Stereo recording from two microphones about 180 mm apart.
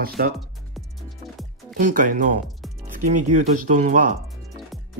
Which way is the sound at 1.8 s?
45° right (ahead or behind).